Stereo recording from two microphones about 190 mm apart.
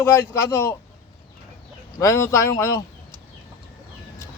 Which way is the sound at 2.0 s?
15° left (ahead or behind).